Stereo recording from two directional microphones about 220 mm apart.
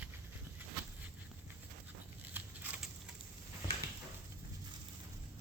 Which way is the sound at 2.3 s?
5° right (ahead or behind).